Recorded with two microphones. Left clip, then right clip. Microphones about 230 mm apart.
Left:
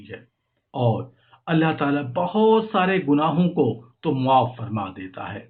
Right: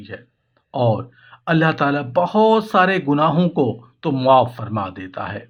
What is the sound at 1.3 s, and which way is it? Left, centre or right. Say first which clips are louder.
Speech: right 4 dB; right.